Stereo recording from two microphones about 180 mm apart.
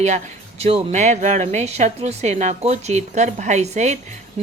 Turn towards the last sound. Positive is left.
turn(degrees=-40)  # may be behind; listen again after turning